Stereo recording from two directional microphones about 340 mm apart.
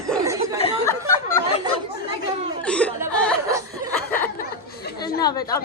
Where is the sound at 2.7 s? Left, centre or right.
Centre.